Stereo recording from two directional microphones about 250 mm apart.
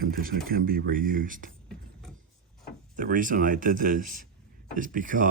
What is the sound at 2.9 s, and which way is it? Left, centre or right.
Speech, right.